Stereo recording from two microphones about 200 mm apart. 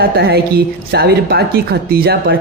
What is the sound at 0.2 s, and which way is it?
Speech, 50° right (ahead or behind).